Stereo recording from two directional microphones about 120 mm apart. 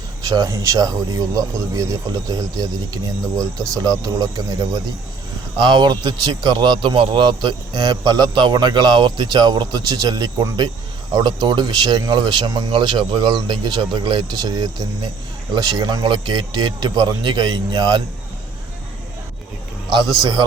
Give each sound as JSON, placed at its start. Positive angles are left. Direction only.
{"t": 0.3, "sound": "a man's voice", "side_deg": -30}